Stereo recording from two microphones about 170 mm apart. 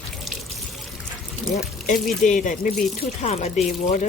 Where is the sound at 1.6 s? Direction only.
50° left (ahead or behind).